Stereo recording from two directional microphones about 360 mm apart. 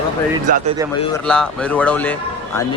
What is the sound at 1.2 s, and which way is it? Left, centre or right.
A man's voice, centre.